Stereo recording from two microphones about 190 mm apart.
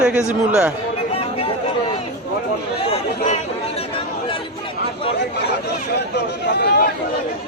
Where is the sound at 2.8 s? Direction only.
40° left (ahead or behind).